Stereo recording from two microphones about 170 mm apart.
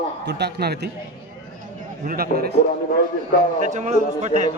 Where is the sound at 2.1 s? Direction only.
60° right (ahead or behind).